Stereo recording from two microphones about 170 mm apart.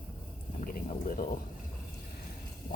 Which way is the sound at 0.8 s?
55° left (ahead or behind).